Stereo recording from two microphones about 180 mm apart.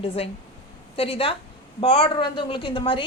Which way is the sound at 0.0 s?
30° left (ahead or behind).